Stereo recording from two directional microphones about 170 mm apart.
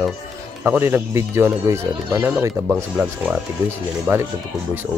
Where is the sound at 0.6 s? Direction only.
10° right (ahead or behind).